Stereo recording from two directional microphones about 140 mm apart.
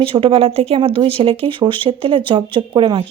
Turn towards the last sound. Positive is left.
turn(degrees=-35)  # may be behind; listen again after turning